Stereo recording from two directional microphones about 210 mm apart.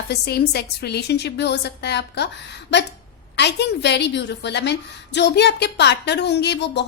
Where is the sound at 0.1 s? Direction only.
50° left (ahead or behind).